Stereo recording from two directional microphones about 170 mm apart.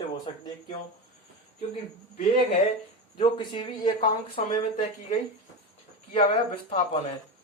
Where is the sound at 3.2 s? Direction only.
30° left (ahead or behind).